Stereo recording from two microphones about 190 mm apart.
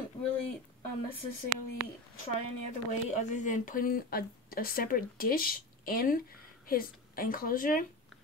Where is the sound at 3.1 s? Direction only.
40° left (ahead or behind).